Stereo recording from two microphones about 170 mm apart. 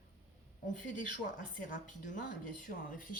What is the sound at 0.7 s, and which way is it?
Speech, 50° left (ahead or behind).